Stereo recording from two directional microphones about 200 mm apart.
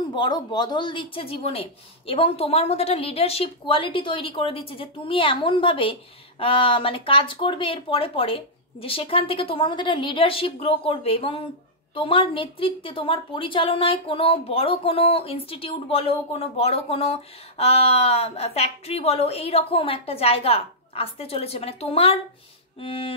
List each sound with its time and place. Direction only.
0.1 s a woman's voice: 20° left (ahead or behind)